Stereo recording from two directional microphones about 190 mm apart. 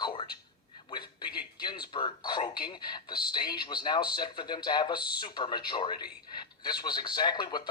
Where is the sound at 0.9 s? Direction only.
25° left (ahead or behind).